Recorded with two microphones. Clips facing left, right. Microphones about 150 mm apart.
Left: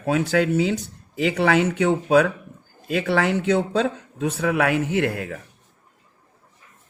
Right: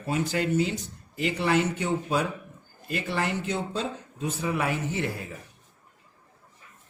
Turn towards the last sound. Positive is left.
turn(degrees=75)  # may be behind; listen again after turning